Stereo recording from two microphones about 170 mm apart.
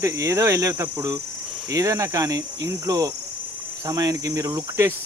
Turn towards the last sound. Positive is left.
turn(degrees=-20)  # may be behind; listen again after turning